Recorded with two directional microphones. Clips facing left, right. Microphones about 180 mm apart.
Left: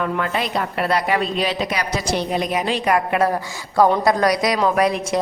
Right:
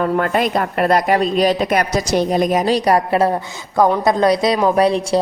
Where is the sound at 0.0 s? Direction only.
45° right (ahead or behind).